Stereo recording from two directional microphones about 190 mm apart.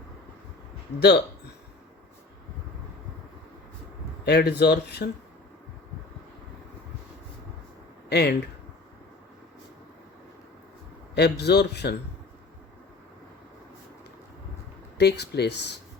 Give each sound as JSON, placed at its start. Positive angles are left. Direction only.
{"t": 4.3, "sound": "speech", "side_deg": 60}
{"t": 8.1, "sound": "speech", "side_deg": 60}
{"t": 11.1, "sound": "speech", "side_deg": 60}
{"t": 14.9, "sound": "speech", "side_deg": 60}